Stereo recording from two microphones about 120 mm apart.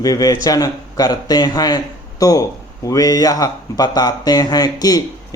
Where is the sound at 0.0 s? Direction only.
30° left (ahead or behind).